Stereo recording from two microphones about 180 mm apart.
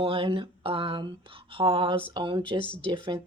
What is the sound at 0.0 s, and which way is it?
Speech, 30° right (ahead or behind).